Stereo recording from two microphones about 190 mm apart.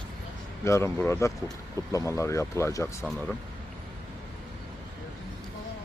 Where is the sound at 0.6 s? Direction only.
15° left (ahead or behind).